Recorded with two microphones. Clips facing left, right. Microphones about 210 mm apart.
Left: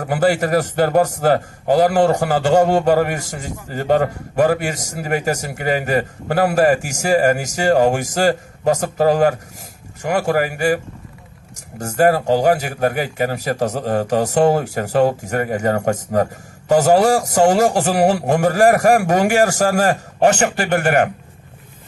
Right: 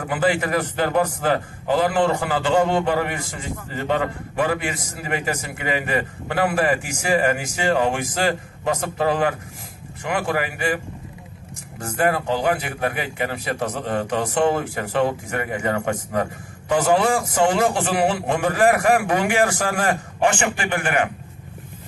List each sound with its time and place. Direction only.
0.0 s speech: 45° left (ahead or behind)
11.8 s speech: 40° left (ahead or behind)